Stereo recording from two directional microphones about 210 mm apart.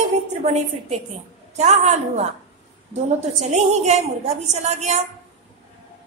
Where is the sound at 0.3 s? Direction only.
30° right (ahead or behind).